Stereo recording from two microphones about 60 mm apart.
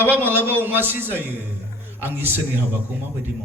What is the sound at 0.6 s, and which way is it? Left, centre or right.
A man's voice, right.